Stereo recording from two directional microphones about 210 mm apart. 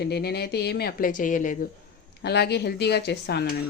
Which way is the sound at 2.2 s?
50° left (ahead or behind).